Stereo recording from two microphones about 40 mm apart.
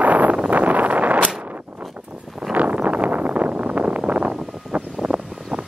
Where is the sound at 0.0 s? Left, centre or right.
Right.